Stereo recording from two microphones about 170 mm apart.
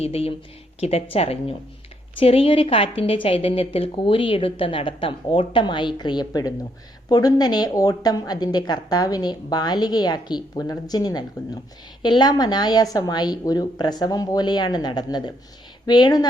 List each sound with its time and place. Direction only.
0.0 s a woman's voice: 35° left (ahead or behind)